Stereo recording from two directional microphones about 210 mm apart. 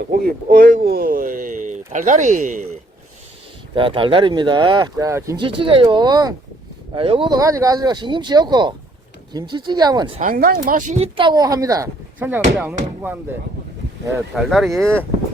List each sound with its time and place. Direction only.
0.0 s speech: 45° right (ahead or behind)
3.8 s speech: 25° right (ahead or behind)
10.2 s speech: 40° right (ahead or behind); by 13.1 s 10° right (ahead or behind)
14.3 s speech: centre (ahead or behind)